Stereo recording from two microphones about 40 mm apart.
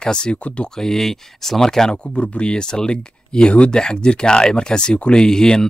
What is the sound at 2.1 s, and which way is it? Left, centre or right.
Speech, left.